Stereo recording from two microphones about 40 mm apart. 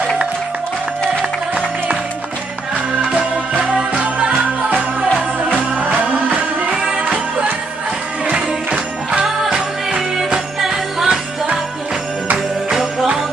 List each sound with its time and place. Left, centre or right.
3.0 s music: right
5.4 s music: right
9.1 s music: centre